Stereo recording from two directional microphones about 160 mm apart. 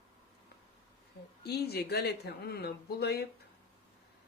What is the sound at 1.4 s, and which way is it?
Speech, 85° left.